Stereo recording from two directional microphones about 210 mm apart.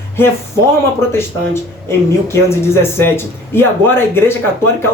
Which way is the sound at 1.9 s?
10° left (ahead or behind).